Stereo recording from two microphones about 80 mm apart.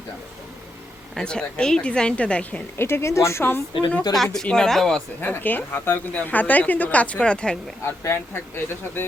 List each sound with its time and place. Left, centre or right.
1.1 s a woman's voice: centre
2.7 s a woman's voice: left
4.1 s speech: centre
5.2 s a woman's voice: left
7.9 s a woman's voice: left